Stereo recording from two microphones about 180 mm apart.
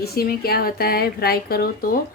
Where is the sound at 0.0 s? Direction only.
60° left (ahead or behind).